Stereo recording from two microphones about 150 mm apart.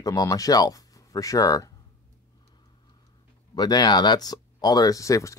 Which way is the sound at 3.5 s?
30° left (ahead or behind).